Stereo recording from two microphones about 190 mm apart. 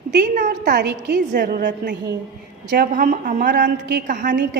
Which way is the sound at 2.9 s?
45° right (ahead or behind).